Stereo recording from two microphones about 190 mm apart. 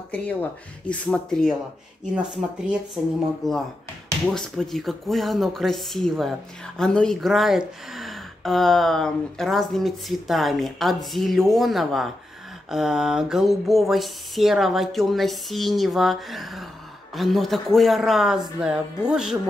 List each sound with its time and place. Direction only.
0.1 s speech: 5° left (ahead or behind)
3.4 s speech: centre (ahead or behind)